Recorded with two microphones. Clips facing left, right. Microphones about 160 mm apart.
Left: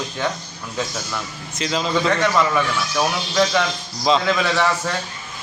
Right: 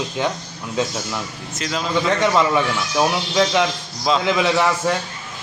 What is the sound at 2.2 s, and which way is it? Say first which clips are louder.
A man's voice: right 2 dB; 20° right (ahead or behind).